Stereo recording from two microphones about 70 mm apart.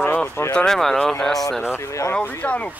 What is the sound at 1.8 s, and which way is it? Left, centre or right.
Speech, left.